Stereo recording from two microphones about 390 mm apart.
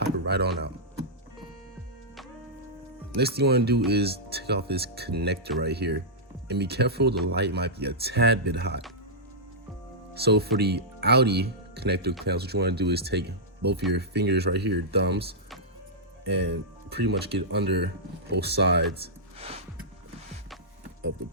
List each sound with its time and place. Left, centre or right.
0.0 s a sound: right
3.2 s speech: right
10.2 s speech: right
16.9 s speech: right
19.4 s music: centre